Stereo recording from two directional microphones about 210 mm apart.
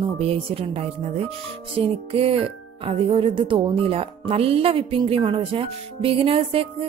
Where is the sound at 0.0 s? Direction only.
30° right (ahead or behind).